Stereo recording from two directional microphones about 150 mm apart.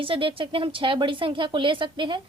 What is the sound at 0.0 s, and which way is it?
A woman's voice, 35° right (ahead or behind).